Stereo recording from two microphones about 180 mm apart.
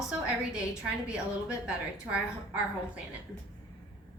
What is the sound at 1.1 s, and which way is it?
A woman's voice, 5° right (ahead or behind).